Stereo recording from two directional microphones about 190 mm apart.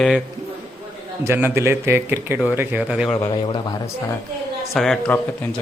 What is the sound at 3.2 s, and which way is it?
Speech, 25° left (ahead or behind).